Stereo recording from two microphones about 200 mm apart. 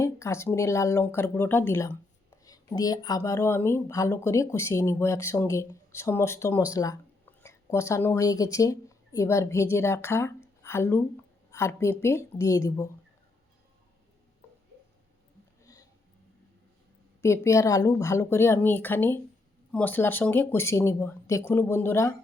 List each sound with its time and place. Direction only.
0.0 s speech: 15° left (ahead or behind)
15.6 s a sound: 15° left (ahead or behind)
17.2 s speech: 15° left (ahead or behind)